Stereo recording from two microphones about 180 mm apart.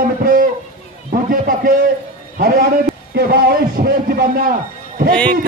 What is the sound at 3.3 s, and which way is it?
Speech, 60° right (ahead or behind).